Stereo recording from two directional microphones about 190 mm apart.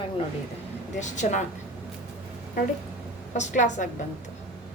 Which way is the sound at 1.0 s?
40° left (ahead or behind).